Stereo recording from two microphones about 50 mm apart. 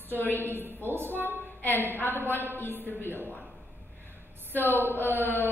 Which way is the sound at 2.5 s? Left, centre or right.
Left.